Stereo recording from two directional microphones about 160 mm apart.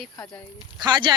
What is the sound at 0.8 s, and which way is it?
Speech, 30° right (ahead or behind).